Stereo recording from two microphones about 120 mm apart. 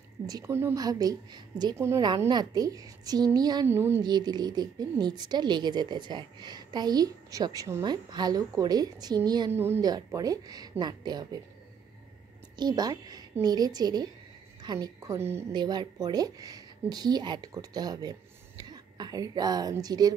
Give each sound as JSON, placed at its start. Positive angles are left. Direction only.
{"t": 0.5, "sound": "a woman's voice", "side_deg": -20}
{"t": 0.7, "sound": "a woman's voice", "side_deg": -30}
{"t": 3.6, "sound": "a woman's voice", "side_deg": -20}
{"t": 4.0, "sound": "a woman's voice", "side_deg": -35}
{"t": 9.5, "sound": "a woman's voice", "side_deg": -20}
{"t": 9.8, "sound": "a woman's voice", "side_deg": -30}
{"t": 12.5, "sound": "a woman's voice", "side_deg": -35}
{"t": 15.5, "sound": "a woman's voice", "side_deg": -40}